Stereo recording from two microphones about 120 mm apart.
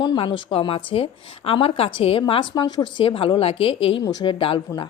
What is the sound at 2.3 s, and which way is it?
A woman's voice, 40° left (ahead or behind).